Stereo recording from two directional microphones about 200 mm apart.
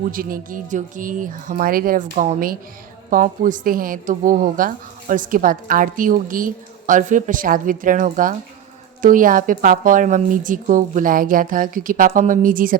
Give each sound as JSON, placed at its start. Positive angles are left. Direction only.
{"t": 0.0, "sound": "a woman's voice", "side_deg": -45}